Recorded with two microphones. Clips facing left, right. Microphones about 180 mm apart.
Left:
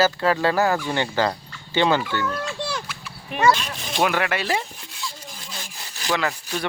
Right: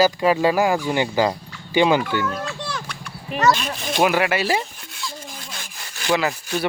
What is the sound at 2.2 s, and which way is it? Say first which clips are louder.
A child's voice: even; centre (ahead or behind).